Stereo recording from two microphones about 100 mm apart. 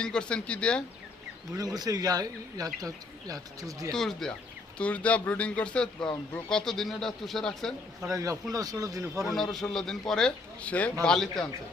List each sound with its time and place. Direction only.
0.0 s speech: 10° left (ahead or behind)
1.5 s speech: 40° right (ahead or behind)
3.9 s a man's voice: 5° left (ahead or behind)
8.0 s speech: 35° right (ahead or behind)
9.3 s a man's voice: centre (ahead or behind)